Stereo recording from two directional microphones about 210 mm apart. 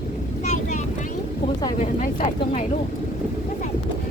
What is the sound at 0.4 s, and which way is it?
Vehicle, 35° left (ahead or behind).